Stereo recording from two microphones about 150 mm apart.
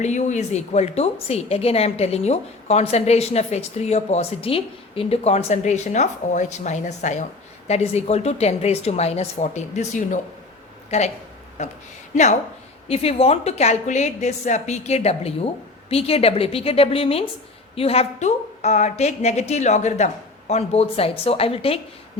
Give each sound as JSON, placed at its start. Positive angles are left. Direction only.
{"t": 0.0, "sound": "a woman's voice", "side_deg": 50}